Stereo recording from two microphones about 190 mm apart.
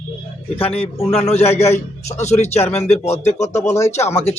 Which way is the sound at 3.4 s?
15° left (ahead or behind).